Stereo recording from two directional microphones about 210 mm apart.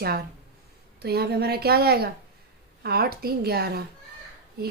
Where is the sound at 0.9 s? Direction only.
50° right (ahead or behind).